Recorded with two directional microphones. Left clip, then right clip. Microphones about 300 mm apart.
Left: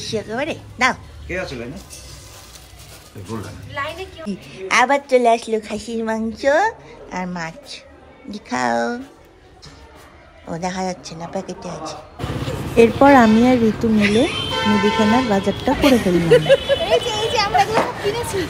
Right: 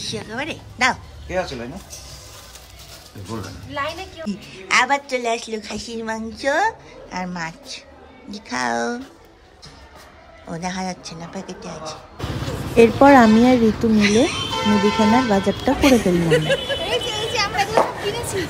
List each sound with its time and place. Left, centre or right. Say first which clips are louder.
0.0 s a woman's voice: left 4 dB; centre
3.7 s a woman's voice: even; right
4.3 s a woman's voice: even; centre
10.5 s a woman's voice: left 3 dB; centre